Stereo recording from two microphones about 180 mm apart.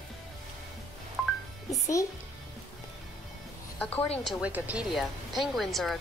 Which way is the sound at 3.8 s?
10° left (ahead or behind).